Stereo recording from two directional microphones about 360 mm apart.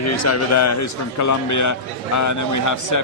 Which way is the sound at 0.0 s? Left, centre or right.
Left.